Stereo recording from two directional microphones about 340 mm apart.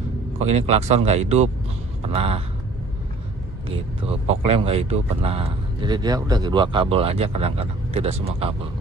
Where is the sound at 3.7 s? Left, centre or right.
Centre.